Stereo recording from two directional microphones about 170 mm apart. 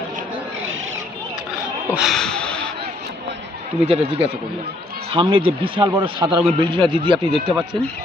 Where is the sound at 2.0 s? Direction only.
Centre (ahead or behind).